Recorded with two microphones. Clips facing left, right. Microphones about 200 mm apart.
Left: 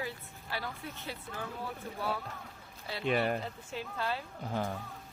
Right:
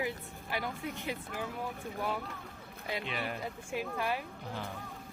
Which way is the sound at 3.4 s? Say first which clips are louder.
Right 3 dB; 10° right (ahead or behind).